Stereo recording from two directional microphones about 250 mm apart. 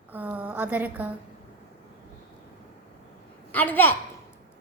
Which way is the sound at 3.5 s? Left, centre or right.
Centre.